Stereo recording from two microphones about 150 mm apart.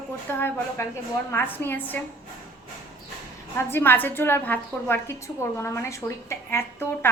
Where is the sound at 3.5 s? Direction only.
15° left (ahead or behind).